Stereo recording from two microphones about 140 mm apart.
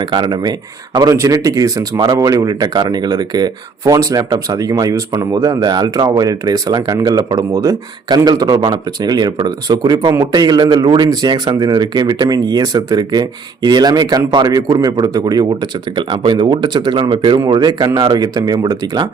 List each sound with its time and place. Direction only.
0.0 s speech: 30° right (ahead or behind)